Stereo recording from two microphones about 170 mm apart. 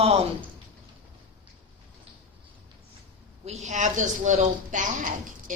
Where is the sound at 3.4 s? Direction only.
40° right (ahead or behind).